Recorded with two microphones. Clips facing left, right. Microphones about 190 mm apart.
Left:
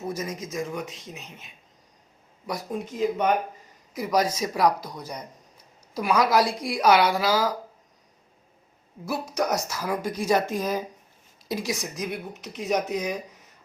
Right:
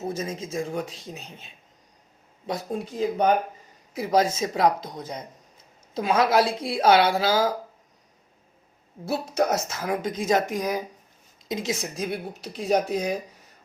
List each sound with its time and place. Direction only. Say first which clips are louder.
0.0 s speech: right 1 dB; 25° right (ahead or behind)
9.0 s speech: right 2 dB; 25° right (ahead or behind)